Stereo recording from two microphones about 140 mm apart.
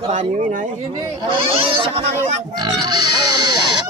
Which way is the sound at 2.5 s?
30° right (ahead or behind).